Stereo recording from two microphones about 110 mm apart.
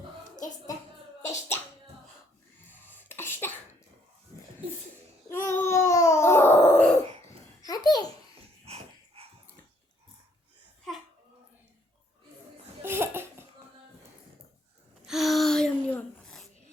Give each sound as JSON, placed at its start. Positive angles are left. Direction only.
{"t": 1.3, "sound": "music", "side_deg": 20}
{"t": 2.6, "sound": "cough", "side_deg": 20}
{"t": 5.3, "sound": "babbling", "side_deg": 25}
{"t": 7.6, "sound": "babbling", "side_deg": 35}
{"t": 8.6, "sound": "dog", "side_deg": -65}
{"t": 12.8, "sound": "laughter", "side_deg": -20}
{"t": 15.0, "sound": "a sound", "side_deg": 0}